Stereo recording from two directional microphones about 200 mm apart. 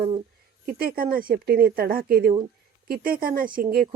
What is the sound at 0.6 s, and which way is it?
Speech, 45° right (ahead or behind).